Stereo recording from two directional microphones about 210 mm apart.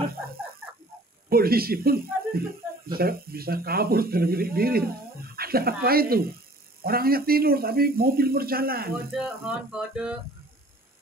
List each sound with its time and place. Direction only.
1.3 s speech: 45° right (ahead or behind)
9.1 s music: 5° right (ahead or behind)